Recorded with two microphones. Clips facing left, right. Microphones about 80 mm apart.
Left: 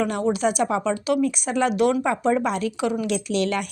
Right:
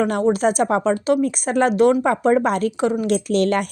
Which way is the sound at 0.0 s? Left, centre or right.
Right.